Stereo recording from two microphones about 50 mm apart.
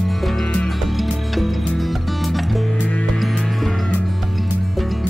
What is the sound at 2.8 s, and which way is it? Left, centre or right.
Music, left.